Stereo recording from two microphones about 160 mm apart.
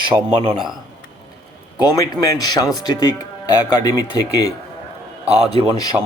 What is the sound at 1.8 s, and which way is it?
Speech, 20° left (ahead or behind).